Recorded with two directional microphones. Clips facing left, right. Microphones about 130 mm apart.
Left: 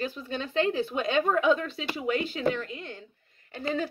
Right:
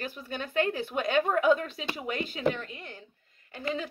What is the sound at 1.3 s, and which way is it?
Speech, 30° left (ahead or behind).